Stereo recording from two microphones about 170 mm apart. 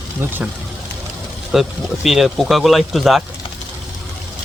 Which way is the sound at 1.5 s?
Centre (ahead or behind).